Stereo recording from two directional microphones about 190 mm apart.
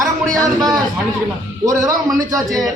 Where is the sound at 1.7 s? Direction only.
15° right (ahead or behind).